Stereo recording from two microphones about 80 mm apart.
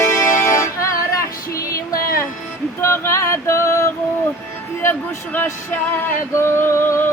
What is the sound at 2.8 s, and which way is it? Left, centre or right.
Music, left.